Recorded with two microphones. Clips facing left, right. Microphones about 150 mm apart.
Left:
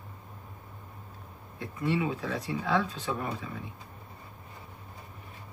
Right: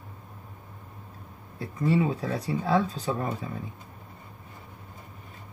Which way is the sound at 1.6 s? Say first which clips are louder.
Right 4 dB; 35° right (ahead or behind).